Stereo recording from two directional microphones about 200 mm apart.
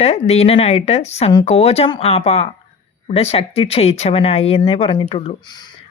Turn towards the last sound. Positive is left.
turn(degrees=20)  # may be behind; listen again after turning